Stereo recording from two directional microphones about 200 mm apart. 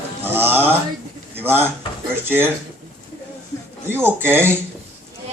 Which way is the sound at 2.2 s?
10° right (ahead or behind).